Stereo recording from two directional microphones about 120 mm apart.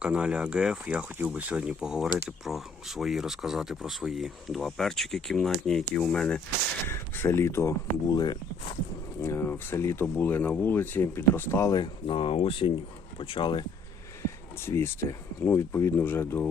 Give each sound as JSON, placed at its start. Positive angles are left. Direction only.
{"t": 0.0, "sound": "speech", "side_deg": -10}
{"t": 6.8, "sound": "speech", "side_deg": 20}
{"t": 8.1, "sound": "speech", "side_deg": 35}
{"t": 9.2, "sound": "speech", "side_deg": 20}
{"t": 11.7, "sound": "speech", "side_deg": 35}
{"t": 12.1, "sound": "speech", "side_deg": 50}
{"t": 14.6, "sound": "speech", "side_deg": 20}